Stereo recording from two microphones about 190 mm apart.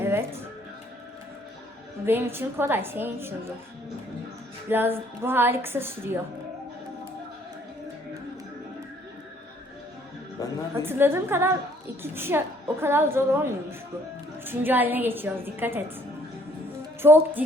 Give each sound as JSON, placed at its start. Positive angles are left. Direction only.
{"t": 0.0, "sound": "music", "side_deg": -10}
{"t": 2.0, "sound": "a woman's voice", "side_deg": -10}
{"t": 4.7, "sound": "a woman's voice", "side_deg": -10}
{"t": 10.4, "sound": "a sound", "side_deg": 20}
{"t": 10.8, "sound": "a woman's voice", "side_deg": -10}
{"t": 17.0, "sound": "a woman's voice", "side_deg": -10}